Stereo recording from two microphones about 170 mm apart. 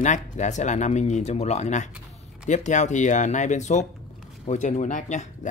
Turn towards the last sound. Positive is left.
turn(degrees=45)  # may be behind; listen again after turning